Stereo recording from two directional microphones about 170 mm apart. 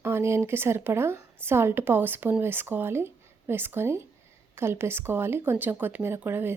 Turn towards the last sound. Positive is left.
turn(degrees=-10)  # may be behind; listen again after turning